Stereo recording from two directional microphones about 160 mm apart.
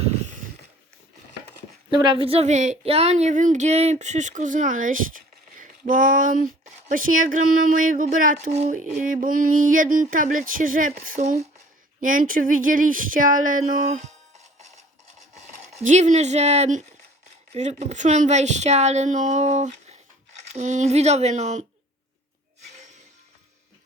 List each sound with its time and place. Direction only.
0.0 s a sound: 40° right (ahead or behind)
1.9 s speech: 30° right (ahead or behind); by 14.0 s 55° right (ahead or behind)
15.8 s speech: 50° right (ahead or behind)